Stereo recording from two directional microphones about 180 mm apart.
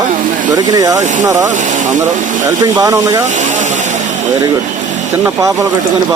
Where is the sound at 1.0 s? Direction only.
40° right (ahead or behind).